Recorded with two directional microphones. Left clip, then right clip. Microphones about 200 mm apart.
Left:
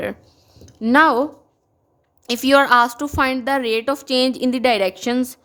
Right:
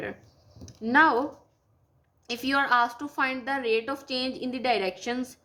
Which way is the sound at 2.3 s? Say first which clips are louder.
Left 11 dB; 50° left (ahead or behind).